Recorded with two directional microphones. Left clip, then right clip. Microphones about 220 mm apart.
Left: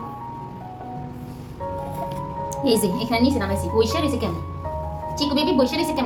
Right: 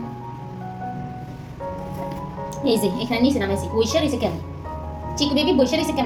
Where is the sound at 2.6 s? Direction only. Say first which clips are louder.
Even; 20° left (ahead or behind).